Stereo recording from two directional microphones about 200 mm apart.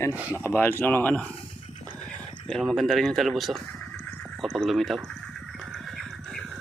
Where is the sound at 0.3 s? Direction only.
10° left (ahead or behind).